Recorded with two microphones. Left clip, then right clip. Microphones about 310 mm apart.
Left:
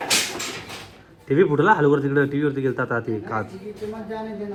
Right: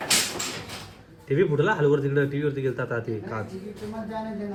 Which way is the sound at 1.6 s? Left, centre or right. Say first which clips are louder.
Left 6 dB; centre.